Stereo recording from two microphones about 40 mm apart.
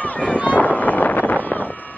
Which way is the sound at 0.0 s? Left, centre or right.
Left.